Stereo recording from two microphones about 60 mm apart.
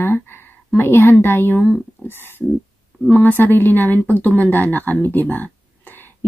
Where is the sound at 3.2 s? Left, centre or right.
Left.